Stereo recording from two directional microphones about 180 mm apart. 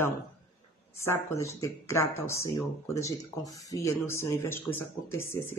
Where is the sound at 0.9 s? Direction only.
15° left (ahead or behind).